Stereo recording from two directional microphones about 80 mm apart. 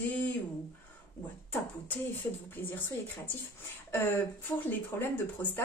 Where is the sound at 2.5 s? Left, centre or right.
Left.